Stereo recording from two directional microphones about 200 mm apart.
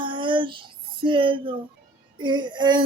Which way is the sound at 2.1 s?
20° right (ahead or behind).